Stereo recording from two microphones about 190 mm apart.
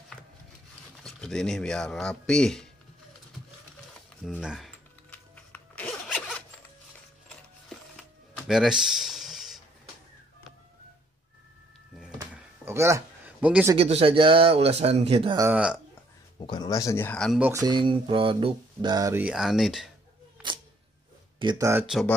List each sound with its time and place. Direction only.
1.0 s speech: 5° left (ahead or behind)
4.2 s music: centre (ahead or behind)
7.9 s a sound: centre (ahead or behind)
12.4 s a sound: 15° right (ahead or behind)
13.7 s speech: 30° right (ahead or behind)
15.3 s mantra: 10° right (ahead or behind)
16.3 s speech: 20° left (ahead or behind); by 17.4 s 5° left (ahead or behind)
17.4 s mantra: 15° right (ahead or behind); by 19.9 s centre (ahead or behind)
21.4 s mantra: 20° right (ahead or behind)
21.8 s speech: centre (ahead or behind)